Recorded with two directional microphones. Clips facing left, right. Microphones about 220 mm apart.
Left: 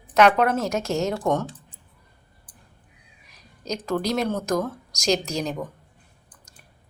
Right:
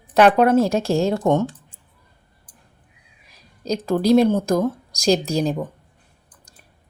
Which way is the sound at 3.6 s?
35° right (ahead or behind).